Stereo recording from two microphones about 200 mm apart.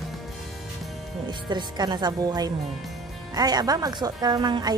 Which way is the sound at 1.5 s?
20° right (ahead or behind).